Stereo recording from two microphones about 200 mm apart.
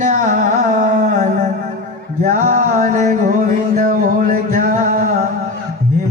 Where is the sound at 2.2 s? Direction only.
40° right (ahead or behind).